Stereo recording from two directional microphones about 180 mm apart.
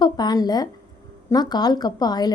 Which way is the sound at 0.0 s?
20° left (ahead or behind).